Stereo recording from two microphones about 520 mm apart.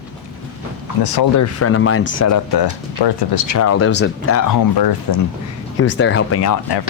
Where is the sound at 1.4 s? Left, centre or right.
Left.